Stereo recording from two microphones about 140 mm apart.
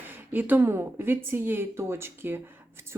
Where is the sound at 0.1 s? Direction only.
15° right (ahead or behind).